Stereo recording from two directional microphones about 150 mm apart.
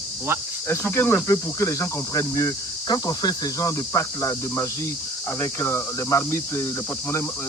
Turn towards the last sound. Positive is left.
turn(degrees=20)  # may be behind; listen again after turning